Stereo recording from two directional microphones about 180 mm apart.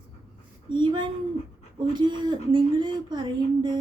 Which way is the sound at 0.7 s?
25° right (ahead or behind).